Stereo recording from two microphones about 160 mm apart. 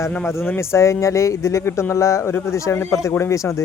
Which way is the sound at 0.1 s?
10° left (ahead or behind).